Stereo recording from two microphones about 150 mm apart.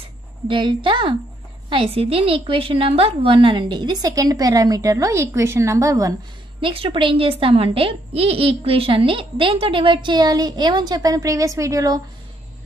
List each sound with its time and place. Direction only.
0.5 s a woman's voice: 35° right (ahead or behind)
6.6 s speech: 35° right (ahead or behind)